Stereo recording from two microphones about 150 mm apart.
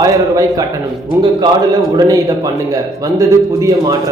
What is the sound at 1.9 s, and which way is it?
Speech, 25° right (ahead or behind).